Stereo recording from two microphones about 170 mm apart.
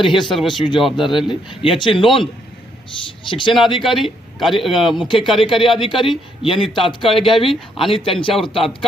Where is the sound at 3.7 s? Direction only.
Centre (ahead or behind).